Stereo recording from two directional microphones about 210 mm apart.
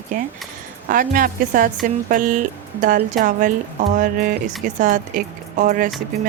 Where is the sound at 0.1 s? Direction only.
40° right (ahead or behind).